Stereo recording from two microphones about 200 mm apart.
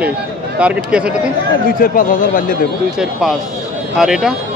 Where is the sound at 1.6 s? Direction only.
45° left (ahead or behind).